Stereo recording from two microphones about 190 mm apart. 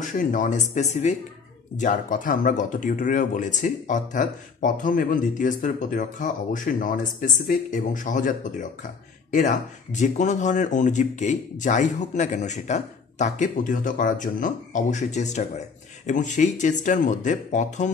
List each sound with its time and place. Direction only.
0.0 s speech: 40° left (ahead or behind)